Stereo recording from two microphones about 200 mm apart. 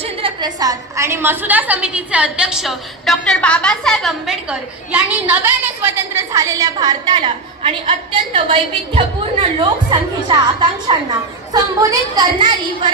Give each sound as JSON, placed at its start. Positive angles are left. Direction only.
{"t": 0.0, "sound": "a woman's voice", "side_deg": -25}